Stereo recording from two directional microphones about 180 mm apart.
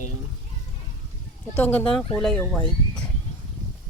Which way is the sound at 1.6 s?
10° left (ahead or behind).